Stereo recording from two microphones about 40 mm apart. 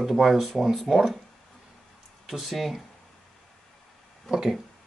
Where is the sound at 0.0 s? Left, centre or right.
Centre.